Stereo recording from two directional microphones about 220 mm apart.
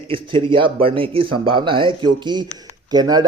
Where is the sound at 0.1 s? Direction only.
25° right (ahead or behind).